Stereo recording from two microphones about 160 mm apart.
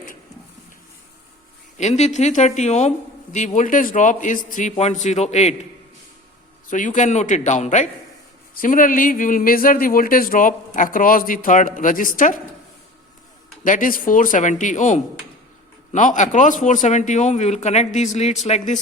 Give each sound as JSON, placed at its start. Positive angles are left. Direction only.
{"t": 1.8, "sound": "a man's voice", "side_deg": 45}
{"t": 6.7, "sound": "a man's voice", "side_deg": 50}
{"t": 13.7, "sound": "a man's voice", "side_deg": 55}